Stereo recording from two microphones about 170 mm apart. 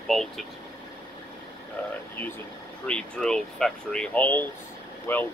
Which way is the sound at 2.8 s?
5° left (ahead or behind).